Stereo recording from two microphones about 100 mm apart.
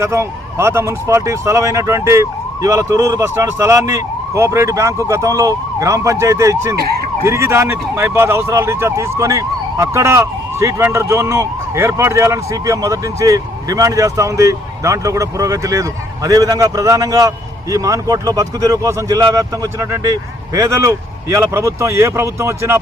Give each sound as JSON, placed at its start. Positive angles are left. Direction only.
{"t": 0.0, "sound": "speech", "side_deg": -25}